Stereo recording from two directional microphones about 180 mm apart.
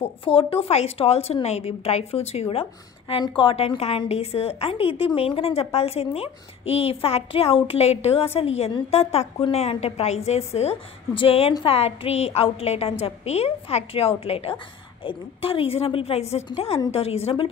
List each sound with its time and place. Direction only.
0.0 s a woman's voice: 30° left (ahead or behind)